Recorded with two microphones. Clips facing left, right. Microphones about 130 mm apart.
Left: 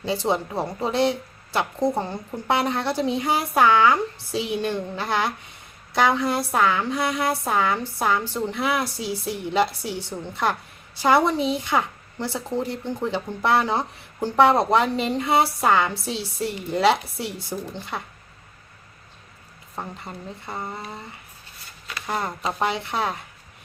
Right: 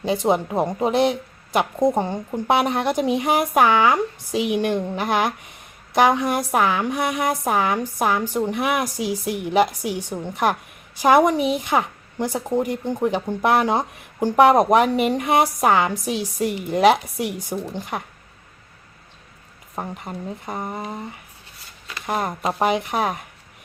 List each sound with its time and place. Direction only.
0.0 s a woman's voice: 15° right (ahead or behind)
19.7 s a woman's voice: 15° right (ahead or behind)